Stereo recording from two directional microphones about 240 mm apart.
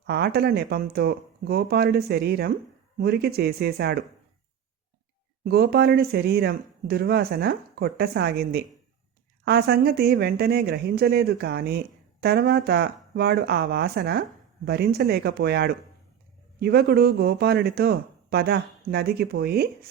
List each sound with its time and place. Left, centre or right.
0.1 s speech: right
5.5 s speech: right